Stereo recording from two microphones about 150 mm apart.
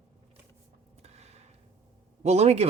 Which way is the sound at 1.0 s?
45° right (ahead or behind).